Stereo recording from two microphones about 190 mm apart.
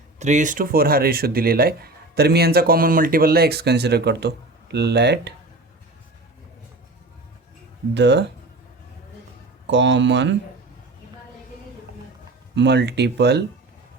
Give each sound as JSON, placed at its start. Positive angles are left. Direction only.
{"t": 0.2, "sound": "speech", "side_deg": -40}
{"t": 7.9, "sound": "speech", "side_deg": -65}
{"t": 9.6, "sound": "speech", "side_deg": -70}
{"t": 12.5, "sound": "speech", "side_deg": -65}